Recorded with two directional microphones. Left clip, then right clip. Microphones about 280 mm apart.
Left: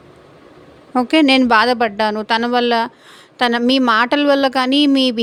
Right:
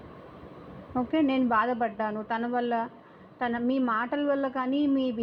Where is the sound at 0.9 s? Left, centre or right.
Left.